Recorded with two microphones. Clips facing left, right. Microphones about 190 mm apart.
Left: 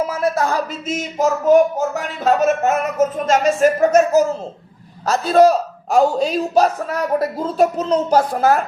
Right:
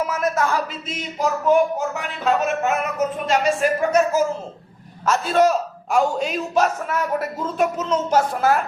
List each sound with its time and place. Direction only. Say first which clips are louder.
0.0 s speech: left 3 dB; 30° left (ahead or behind)